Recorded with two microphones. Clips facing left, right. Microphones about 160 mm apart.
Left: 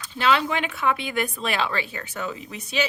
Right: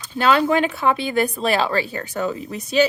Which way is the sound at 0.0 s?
45° right (ahead or behind).